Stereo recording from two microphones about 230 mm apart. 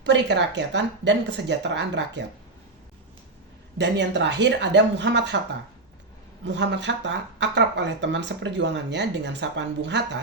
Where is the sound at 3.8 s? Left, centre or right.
Right.